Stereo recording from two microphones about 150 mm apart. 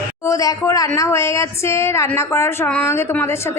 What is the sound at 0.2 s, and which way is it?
A woman's voice, 20° left (ahead or behind).